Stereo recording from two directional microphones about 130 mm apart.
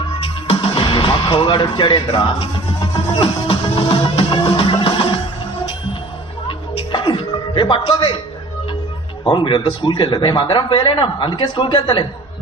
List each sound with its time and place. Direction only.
0.4 s music: 40° left (ahead or behind)
6.5 s music: 40° left (ahead or behind)
9.2 s a man's voice: 40° left (ahead or behind)